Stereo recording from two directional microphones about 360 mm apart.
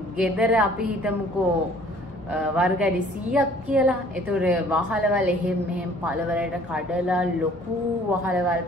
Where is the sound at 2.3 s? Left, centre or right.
Centre.